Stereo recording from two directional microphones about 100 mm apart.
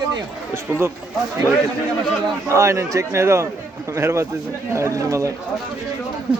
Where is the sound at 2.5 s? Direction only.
30° right (ahead or behind).